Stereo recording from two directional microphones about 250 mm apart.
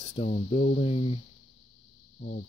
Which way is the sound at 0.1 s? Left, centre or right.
Left.